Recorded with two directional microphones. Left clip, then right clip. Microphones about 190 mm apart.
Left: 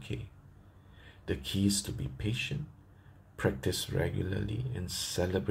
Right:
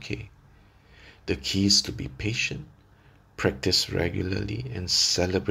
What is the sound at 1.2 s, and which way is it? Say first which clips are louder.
Speech: right 7 dB; 30° right (ahead or behind).